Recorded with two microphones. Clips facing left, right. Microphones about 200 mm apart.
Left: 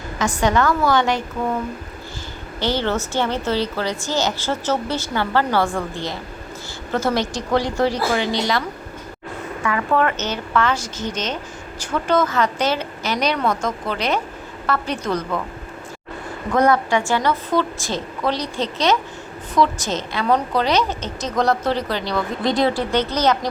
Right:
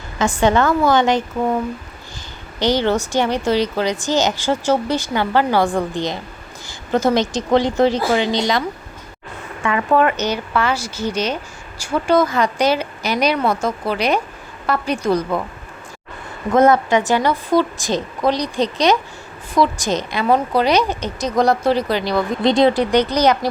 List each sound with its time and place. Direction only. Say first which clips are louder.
0.2 s a woman's voice: right 3 dB; 25° right (ahead or behind)
2.6 s a woman's voice: right 4 dB; 15° right (ahead or behind)
9.6 s a woman's voice: right 4 dB; 20° right (ahead or behind)
16.5 s a woman's voice: right 4 dB; 25° right (ahead or behind)